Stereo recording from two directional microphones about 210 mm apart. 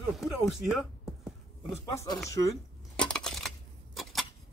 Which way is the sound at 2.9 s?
5° left (ahead or behind).